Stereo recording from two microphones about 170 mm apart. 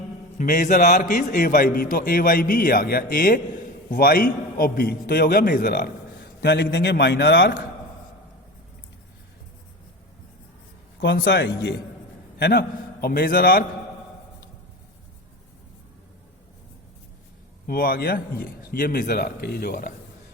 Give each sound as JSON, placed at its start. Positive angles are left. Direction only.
{"t": 0.3, "sound": "a man's voice", "side_deg": 55}
{"t": 6.4, "sound": "a man's voice", "side_deg": 85}
{"t": 11.0, "sound": "a man's voice", "side_deg": 75}
{"t": 12.4, "sound": "a man's voice", "side_deg": 70}
{"t": 17.7, "sound": "a man's voice", "side_deg": 60}